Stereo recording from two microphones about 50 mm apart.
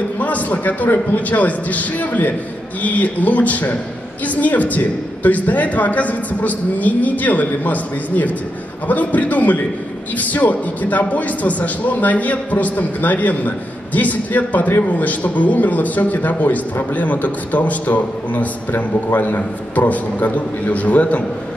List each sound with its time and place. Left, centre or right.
0.2 s a man's voice: left